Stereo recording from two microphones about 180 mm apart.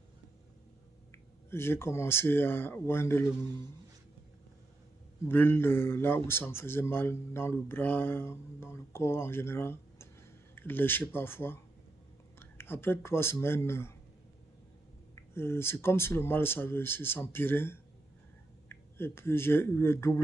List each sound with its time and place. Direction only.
1.5 s a man's voice: 15° left (ahead or behind)
5.3 s a man's voice: 10° left (ahead or behind)
15.3 s a man's voice: 15° left (ahead or behind)